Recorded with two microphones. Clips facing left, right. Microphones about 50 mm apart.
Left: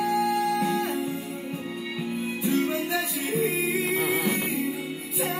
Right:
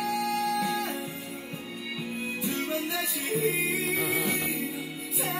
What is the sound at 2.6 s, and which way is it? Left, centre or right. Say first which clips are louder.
Music: left 6 dB; left.